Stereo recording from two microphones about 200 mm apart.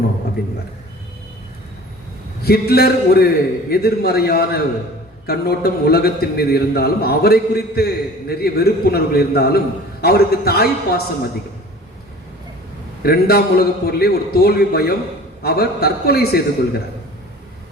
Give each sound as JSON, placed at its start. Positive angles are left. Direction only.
{"t": 0.4, "sound": "a man's voice", "side_deg": 50}
{"t": 2.4, "sound": "a man's voice", "side_deg": 50}
{"t": 13.0, "sound": "a man's voice", "side_deg": 50}